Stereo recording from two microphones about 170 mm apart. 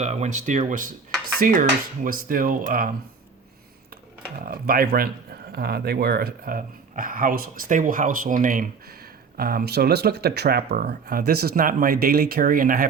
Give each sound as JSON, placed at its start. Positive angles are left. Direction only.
{"t": 0.0, "sound": "speech", "side_deg": -40}
{"t": 4.4, "sound": "speech", "side_deg": -60}
{"t": 9.4, "sound": "speech", "side_deg": -60}